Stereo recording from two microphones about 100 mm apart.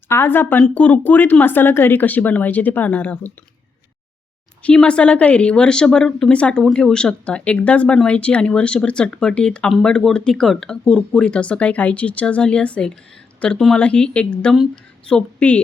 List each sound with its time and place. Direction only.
0.1 s a woman's voice: 20° left (ahead or behind)
4.6 s speech: 10° left (ahead or behind)